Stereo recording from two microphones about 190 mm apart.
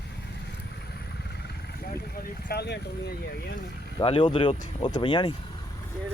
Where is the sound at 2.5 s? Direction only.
60° left (ahead or behind).